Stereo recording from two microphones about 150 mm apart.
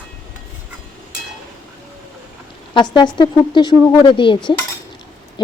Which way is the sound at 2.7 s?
30° left (ahead or behind).